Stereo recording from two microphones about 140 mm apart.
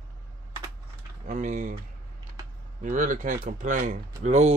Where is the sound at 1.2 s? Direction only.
65° right (ahead or behind).